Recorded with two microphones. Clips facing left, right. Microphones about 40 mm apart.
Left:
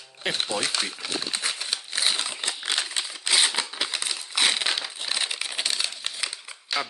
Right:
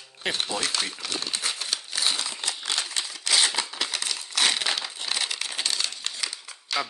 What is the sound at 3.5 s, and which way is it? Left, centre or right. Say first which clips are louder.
Crumpling: left 1 dB; centre.